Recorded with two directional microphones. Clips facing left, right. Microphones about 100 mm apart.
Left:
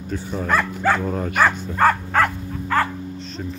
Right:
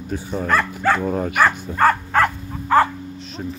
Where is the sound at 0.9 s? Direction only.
15° right (ahead or behind).